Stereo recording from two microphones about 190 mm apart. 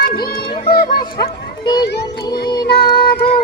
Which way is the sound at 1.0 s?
20° left (ahead or behind).